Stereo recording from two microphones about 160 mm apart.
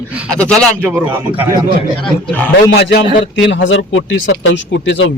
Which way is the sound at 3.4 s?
90° left.